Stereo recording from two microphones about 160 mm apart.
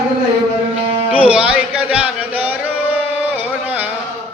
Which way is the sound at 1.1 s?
10° right (ahead or behind).